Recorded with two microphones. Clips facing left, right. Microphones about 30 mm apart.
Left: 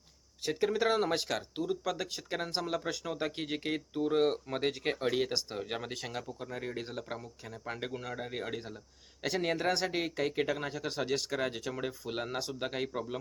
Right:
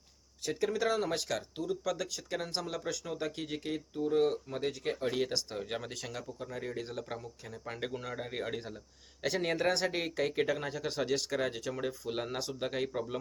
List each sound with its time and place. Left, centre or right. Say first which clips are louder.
0.4 s speech: left 2 dB; left
5.1 s speech: left 1 dB; centre